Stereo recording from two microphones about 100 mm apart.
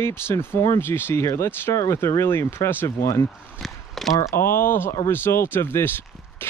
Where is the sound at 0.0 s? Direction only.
25° left (ahead or behind).